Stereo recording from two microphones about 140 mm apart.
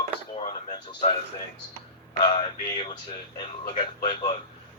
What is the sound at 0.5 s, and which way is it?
Speech, 45° left (ahead or behind).